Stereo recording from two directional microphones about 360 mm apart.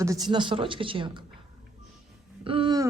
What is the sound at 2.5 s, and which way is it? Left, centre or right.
Speech, centre.